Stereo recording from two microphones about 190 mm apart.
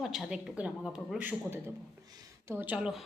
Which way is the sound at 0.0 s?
Centre (ahead or behind).